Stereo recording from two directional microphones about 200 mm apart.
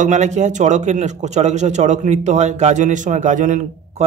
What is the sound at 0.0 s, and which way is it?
Speech, 35° right (ahead or behind).